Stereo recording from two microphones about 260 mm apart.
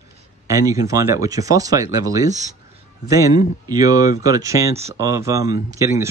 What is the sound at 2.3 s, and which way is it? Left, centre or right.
Speech, right.